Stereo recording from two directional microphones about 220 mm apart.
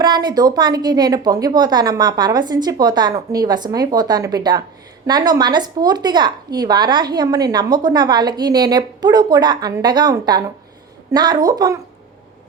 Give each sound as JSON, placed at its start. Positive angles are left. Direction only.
{"t": 0.0, "sound": "a woman's voice", "side_deg": -20}